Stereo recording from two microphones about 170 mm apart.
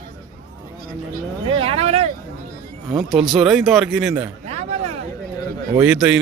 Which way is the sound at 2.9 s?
Centre (ahead or behind).